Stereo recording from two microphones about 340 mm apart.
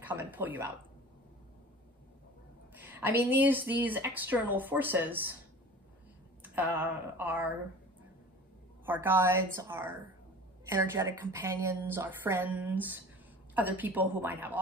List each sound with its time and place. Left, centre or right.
0.0 s speech: centre
2.7 s speech: centre
6.4 s speech: centre
8.8 s a woman's voice: centre